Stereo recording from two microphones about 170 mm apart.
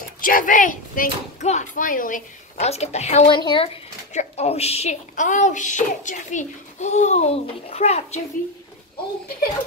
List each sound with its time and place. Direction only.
0.2 s speech: 55° left (ahead or behind)